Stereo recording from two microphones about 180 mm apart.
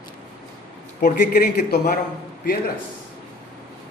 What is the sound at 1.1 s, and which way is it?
Speech, 50° left (ahead or behind).